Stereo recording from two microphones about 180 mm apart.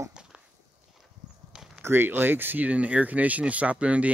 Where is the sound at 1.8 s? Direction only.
10° right (ahead or behind).